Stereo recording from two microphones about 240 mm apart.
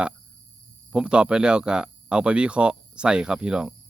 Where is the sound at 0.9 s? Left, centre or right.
Centre.